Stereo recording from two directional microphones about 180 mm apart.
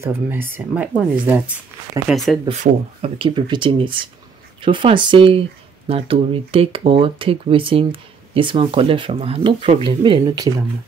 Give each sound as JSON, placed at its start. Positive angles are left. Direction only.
{"t": 0.0, "sound": "speech", "side_deg": -10}
{"t": 2.6, "sound": "speech", "side_deg": -30}